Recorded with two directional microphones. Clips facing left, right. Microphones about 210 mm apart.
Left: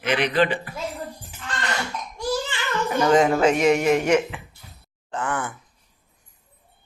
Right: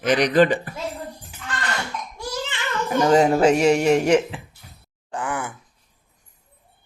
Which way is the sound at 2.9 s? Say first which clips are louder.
Right 2 dB; 35° right (ahead or behind).